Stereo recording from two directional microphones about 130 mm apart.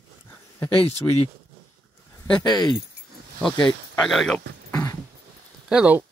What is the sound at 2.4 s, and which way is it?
Speech, 30° left (ahead or behind).